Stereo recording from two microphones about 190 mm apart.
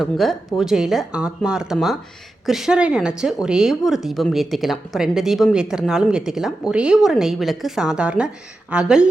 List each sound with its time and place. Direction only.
0.0 s a woman's voice: centre (ahead or behind)